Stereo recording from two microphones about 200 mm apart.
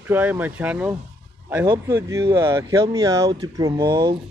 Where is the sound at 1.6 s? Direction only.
15° right (ahead or behind).